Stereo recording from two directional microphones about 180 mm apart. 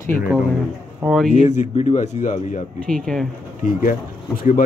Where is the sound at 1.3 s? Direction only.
40° left (ahead or behind).